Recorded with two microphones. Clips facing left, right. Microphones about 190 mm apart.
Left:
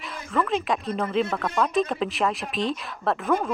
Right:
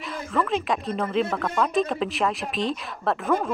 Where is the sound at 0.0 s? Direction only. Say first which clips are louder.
Even; centre (ahead or behind).